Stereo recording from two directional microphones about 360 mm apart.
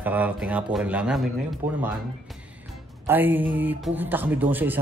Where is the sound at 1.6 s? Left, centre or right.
Right.